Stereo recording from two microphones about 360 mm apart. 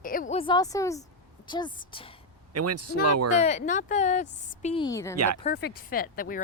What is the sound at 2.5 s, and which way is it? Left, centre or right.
Speech, right.